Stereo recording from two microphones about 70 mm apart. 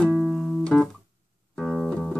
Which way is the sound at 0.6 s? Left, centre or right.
Centre.